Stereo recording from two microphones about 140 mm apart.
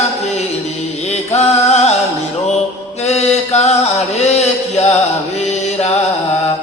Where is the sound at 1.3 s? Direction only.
50° left (ahead or behind).